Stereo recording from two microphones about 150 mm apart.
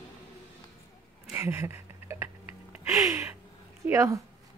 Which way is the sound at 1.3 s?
15° right (ahead or behind).